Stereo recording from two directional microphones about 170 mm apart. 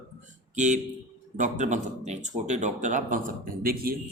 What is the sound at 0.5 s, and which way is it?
Speech, 45° right (ahead or behind).